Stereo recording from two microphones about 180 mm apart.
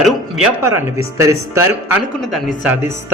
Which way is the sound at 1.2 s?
15° right (ahead or behind).